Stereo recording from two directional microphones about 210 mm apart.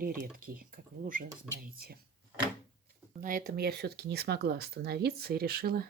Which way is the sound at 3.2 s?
40° right (ahead or behind).